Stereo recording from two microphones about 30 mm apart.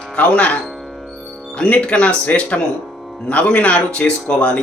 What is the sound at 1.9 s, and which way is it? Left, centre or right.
Speech, left.